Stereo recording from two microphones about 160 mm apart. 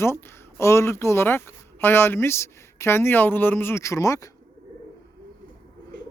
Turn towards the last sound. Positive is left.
turn(degrees=20)  # may be behind; listen again after turning